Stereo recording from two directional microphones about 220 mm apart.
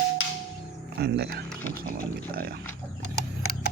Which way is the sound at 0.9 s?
45° right (ahead or behind).